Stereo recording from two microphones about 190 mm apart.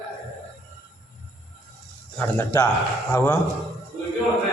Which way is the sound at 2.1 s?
10° left (ahead or behind).